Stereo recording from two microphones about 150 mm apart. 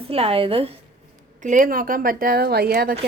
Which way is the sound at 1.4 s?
65° right (ahead or behind).